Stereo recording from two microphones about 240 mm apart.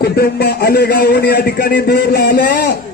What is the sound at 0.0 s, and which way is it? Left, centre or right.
A man's voice, left.